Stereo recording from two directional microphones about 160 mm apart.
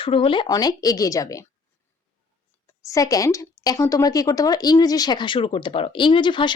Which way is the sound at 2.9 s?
20° left (ahead or behind).